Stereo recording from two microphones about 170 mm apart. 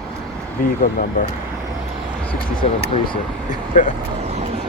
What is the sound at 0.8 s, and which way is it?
Speech, 50° left (ahead or behind).